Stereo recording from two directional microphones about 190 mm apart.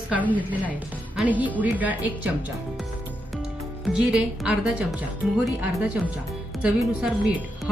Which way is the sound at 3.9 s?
5° right (ahead or behind).